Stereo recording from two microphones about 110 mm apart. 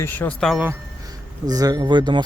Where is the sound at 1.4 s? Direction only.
35° right (ahead or behind).